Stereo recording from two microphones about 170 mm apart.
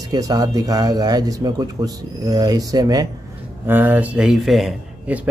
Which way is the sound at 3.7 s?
10° right (ahead or behind).